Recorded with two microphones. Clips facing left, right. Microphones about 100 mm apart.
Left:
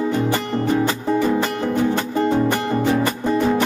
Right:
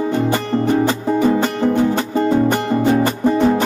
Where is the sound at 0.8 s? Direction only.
35° right (ahead or behind).